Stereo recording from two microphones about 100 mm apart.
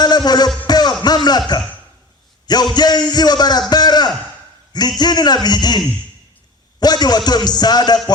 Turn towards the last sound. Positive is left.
turn(degrees=45)  # may be behind; listen again after turning